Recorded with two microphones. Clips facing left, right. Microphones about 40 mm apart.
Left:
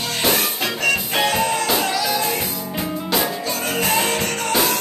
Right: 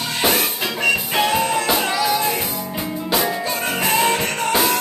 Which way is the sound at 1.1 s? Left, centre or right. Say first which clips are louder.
Right 1 dB; centre.